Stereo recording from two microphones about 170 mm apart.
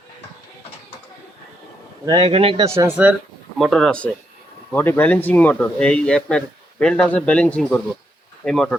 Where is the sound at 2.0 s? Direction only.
25° right (ahead or behind).